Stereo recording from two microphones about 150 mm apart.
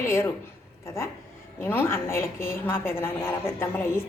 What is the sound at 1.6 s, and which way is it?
A woman's voice, 15° left (ahead or behind).